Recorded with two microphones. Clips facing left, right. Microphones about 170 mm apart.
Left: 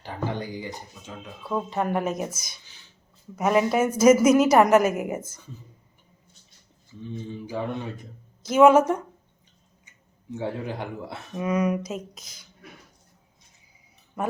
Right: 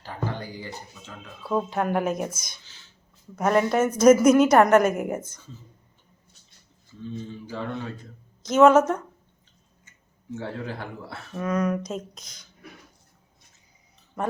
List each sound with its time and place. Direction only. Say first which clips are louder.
0.0 s speech: left 2 dB; 15° left (ahead or behind)
1.5 s a woman's voice: right 2 dB; centre (ahead or behind)
7.0 s speech: even; 15° left (ahead or behind)
10.3 s speech: left 2 dB; 15° left (ahead or behind)